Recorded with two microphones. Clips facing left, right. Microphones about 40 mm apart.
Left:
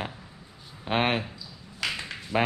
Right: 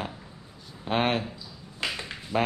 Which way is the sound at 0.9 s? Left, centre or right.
Centre.